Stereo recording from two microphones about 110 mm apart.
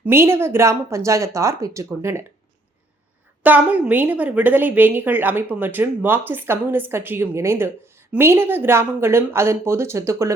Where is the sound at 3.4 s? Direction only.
15° right (ahead or behind).